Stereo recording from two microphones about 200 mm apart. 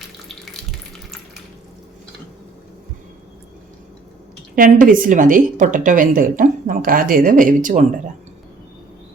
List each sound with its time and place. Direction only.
4.5 s speech: 45° right (ahead or behind)